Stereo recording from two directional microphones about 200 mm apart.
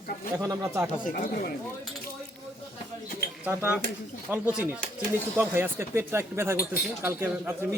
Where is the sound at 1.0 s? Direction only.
45° left (ahead or behind).